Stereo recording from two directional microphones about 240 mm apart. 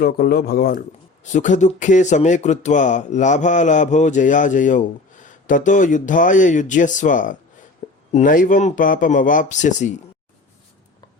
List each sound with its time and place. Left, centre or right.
0.0 s speech: left